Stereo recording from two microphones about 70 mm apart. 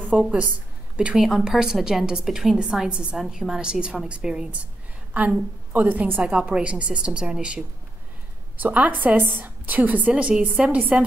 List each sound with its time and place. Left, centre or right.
0.2 s a woman's voice: centre